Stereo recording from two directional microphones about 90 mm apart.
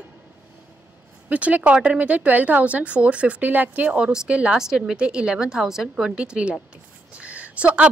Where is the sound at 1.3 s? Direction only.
15° right (ahead or behind).